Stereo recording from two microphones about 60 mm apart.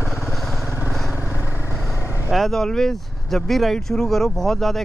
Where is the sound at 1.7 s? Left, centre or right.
Centre.